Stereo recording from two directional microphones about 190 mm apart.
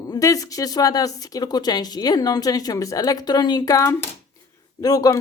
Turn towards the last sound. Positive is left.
turn(degrees=20)  # may be behind; listen again after turning